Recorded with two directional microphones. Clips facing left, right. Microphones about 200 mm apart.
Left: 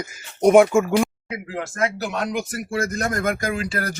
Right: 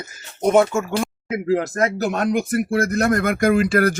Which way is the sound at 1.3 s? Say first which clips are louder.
Right 9 dB; 40° right (ahead or behind).